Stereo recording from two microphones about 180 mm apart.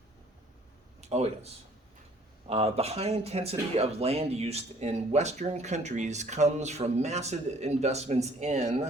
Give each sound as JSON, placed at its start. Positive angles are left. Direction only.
{"t": 1.0, "sound": "speech", "side_deg": -35}
{"t": 2.5, "sound": "speech", "side_deg": -35}